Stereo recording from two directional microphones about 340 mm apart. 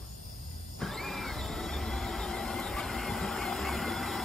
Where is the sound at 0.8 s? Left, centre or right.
Centre.